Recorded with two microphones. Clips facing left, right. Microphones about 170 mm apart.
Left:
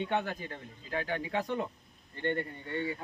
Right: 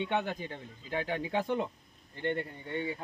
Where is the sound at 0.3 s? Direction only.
20° right (ahead or behind).